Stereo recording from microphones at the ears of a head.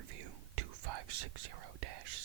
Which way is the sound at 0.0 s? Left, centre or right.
Right.